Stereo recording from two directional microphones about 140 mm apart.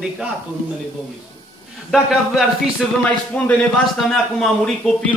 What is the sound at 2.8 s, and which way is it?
Speech, centre (ahead or behind).